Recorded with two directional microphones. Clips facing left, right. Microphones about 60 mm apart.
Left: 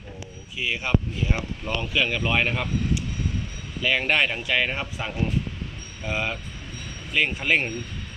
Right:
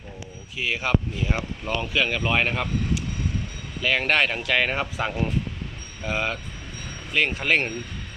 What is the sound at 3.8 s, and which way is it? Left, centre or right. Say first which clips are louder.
Speech: right 1 dB; right.